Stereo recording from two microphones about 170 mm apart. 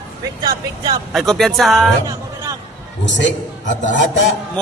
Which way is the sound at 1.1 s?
Centre (ahead or behind).